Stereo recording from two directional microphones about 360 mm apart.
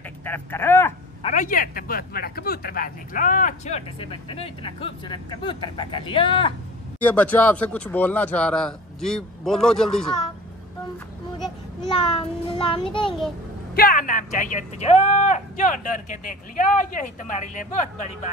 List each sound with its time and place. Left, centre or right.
0.2 s speech: centre
1.3 s speech: left; by 10.2 s centre
11.9 s a child's voice: centre